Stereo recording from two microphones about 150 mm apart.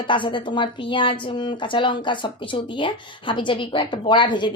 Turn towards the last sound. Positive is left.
turn(degrees=30)  # may be behind; listen again after turning